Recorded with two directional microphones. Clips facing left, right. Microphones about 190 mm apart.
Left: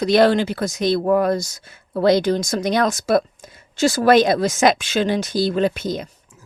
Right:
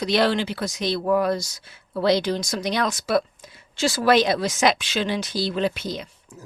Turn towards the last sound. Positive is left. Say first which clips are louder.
# right 8 dB
turn(degrees=-40)  # may be behind; listen again after turning